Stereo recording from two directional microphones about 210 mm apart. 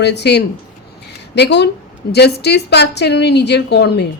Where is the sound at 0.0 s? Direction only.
55° left (ahead or behind).